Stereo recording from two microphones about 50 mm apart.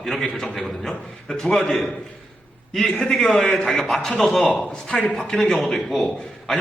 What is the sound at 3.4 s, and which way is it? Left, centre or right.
Speech, left.